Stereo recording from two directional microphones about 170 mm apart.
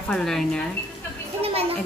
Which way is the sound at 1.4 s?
35° right (ahead or behind).